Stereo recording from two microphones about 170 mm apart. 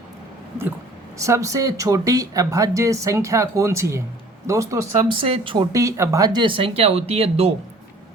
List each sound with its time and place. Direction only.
1.2 s speech: 20° right (ahead or behind)
4.9 s speech: 30° right (ahead or behind)
5.7 s speech: 20° right (ahead or behind); by 7.5 s 35° right (ahead or behind)